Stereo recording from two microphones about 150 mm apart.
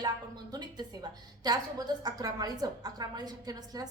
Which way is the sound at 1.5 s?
25° right (ahead or behind).